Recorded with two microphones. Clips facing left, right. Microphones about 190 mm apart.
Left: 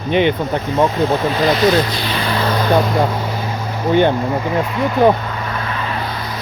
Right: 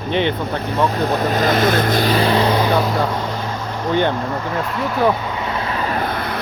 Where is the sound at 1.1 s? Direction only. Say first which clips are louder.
Left 1 dB; 45° right (ahead or behind).